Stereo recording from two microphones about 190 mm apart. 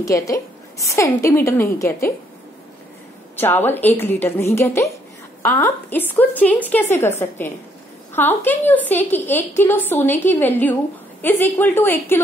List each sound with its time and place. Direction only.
0.0 s a woman's voice: 15° left (ahead or behind)
3.3 s a woman's voice: 10° left (ahead or behind)